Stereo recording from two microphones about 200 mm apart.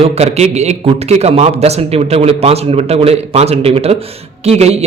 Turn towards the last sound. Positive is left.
turn(degrees=-30)  # may be behind; listen again after turning